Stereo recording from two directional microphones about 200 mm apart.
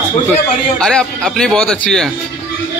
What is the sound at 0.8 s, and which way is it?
A man's voice, 5° left (ahead or behind).